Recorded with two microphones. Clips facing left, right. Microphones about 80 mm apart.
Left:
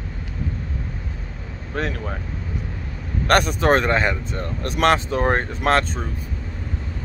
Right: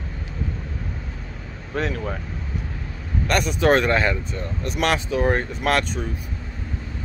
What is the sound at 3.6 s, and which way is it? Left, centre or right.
Speech, left.